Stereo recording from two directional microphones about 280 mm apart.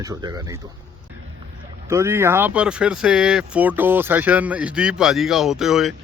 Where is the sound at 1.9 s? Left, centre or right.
Centre.